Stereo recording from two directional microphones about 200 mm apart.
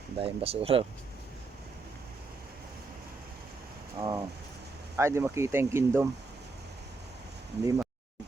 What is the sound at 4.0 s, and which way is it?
Speech, 20° right (ahead or behind).